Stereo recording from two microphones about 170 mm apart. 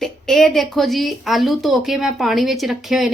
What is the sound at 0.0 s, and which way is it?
A woman's voice, centre (ahead or behind).